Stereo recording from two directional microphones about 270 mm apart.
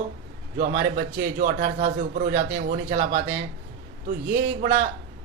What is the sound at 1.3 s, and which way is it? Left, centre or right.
A man's voice, right.